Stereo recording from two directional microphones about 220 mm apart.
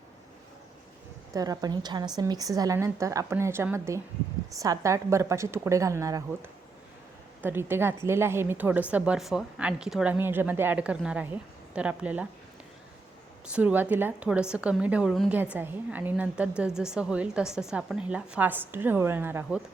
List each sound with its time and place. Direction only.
1.3 s speech: 15° right (ahead or behind)
7.4 s speech: 10° right (ahead or behind)
13.5 s a woman's voice: 5° right (ahead or behind)